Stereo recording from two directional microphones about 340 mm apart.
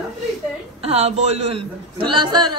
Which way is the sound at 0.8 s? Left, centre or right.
Centre.